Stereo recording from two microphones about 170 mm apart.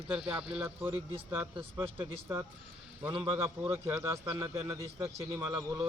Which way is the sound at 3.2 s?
10° right (ahead or behind).